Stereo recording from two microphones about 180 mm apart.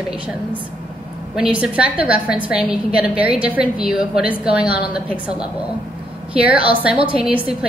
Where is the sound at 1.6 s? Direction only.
5° right (ahead or behind).